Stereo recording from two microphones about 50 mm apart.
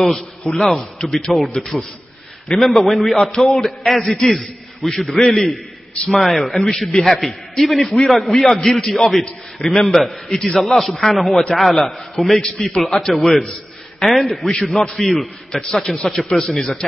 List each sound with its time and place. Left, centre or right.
0.4 s a man's voice: centre
15.8 s a man's voice: left